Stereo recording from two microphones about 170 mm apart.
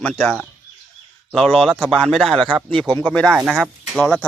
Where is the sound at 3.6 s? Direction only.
5° left (ahead or behind).